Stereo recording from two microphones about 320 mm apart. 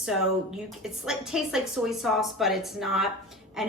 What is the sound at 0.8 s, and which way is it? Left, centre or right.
Speech, centre.